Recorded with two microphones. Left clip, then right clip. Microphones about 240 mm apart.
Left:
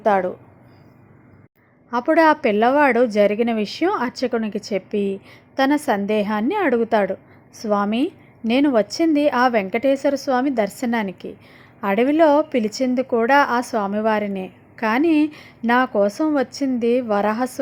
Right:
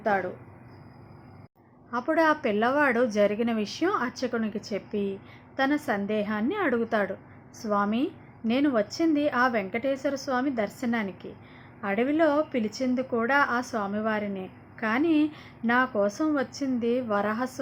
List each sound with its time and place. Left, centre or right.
0.0 s a woman's voice: left
1.9 s a woman's voice: left